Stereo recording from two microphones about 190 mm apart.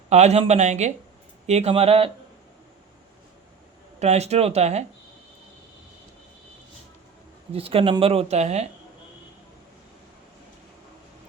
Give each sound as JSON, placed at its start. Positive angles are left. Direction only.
{"t": 0.1, "sound": "speech", "side_deg": -35}
{"t": 4.0, "sound": "speech", "side_deg": -35}
{"t": 7.5, "sound": "speech", "side_deg": -30}